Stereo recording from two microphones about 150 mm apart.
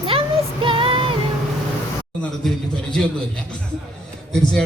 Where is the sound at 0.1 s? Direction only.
35° right (ahead or behind).